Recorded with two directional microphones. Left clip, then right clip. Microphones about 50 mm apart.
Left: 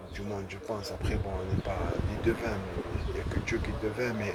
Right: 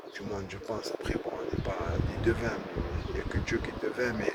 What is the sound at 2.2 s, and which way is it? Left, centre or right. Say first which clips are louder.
Speech: right 1 dB; right.